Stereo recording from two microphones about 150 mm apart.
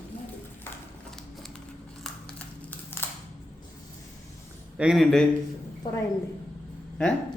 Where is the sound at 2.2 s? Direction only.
10° left (ahead or behind).